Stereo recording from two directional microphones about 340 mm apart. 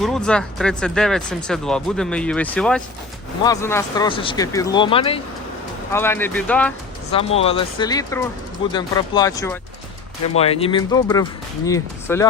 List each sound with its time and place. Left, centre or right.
0.0 s speech: centre
7.1 s speech: centre